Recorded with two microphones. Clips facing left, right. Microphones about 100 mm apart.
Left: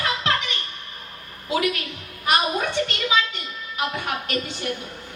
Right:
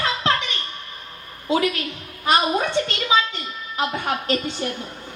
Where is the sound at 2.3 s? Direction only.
30° right (ahead or behind).